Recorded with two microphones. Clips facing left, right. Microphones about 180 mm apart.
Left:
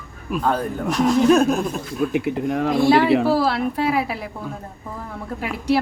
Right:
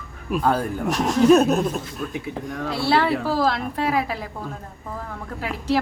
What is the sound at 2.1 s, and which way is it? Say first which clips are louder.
Speech: left 8 dB; 70° left (ahead or behind).